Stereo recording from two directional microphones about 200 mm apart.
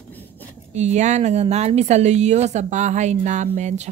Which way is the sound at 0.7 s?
35° right (ahead or behind).